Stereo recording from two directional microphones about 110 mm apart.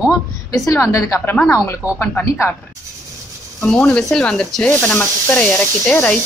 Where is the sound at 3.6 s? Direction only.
10° left (ahead or behind).